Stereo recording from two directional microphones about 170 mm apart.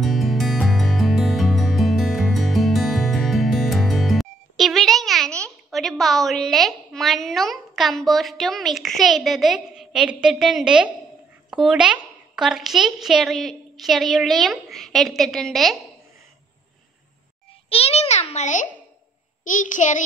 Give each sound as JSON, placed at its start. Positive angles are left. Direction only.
{"t": 0.0, "sound": "music", "side_deg": 0}
{"t": 11.5, "sound": "a woman's voice", "side_deg": -5}
{"t": 17.6, "sound": "a child's voice", "side_deg": 35}